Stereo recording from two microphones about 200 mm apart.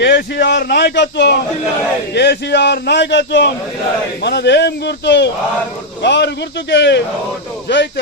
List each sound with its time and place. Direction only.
0.0 s a man's voice: 55° left (ahead or behind)